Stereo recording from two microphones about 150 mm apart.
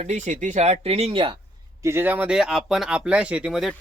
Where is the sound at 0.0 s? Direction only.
55° right (ahead or behind); by 1.4 s 35° right (ahead or behind).